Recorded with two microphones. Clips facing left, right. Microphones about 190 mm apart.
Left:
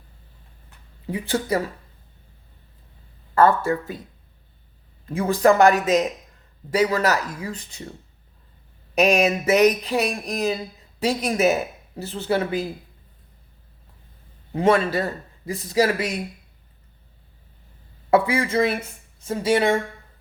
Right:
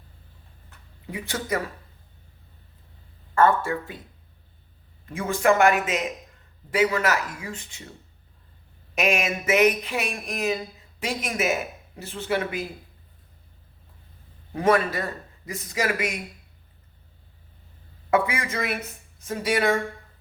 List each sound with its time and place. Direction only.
1.1 s a man's voice: 30° left (ahead or behind)
3.3 s a man's voice: 35° left (ahead or behind)
5.0 s a man's voice: 35° left (ahead or behind)
9.0 s a man's voice: 35° left (ahead or behind)
14.5 s a man's voice: 25° left (ahead or behind)
18.1 s speech: 30° left (ahead or behind)